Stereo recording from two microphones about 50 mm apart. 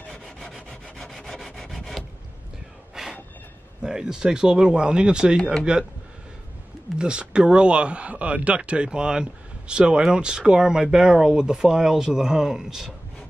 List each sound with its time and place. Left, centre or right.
0.1 s rub: centre
2.9 s a sound: centre
3.8 s speech: centre
7.0 s speech: centre